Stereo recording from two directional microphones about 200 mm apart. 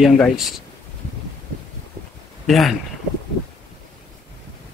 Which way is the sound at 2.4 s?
Centre (ahead or behind).